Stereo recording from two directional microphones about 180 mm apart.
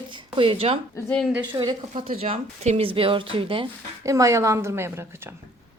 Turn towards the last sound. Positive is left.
turn(degrees=-15)  # may be behind; listen again after turning